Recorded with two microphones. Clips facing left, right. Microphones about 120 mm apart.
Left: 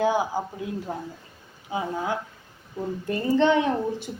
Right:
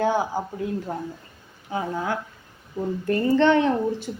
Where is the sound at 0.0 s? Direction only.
15° left (ahead or behind).